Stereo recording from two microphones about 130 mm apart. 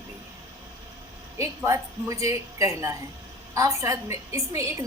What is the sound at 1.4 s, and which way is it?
A woman's voice, 20° right (ahead or behind).